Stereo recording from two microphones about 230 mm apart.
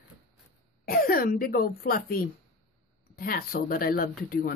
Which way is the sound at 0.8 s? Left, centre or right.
Left.